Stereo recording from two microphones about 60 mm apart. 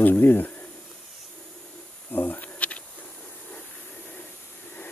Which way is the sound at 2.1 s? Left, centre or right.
Left.